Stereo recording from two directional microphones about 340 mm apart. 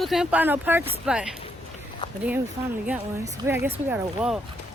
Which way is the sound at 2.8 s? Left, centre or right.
Centre.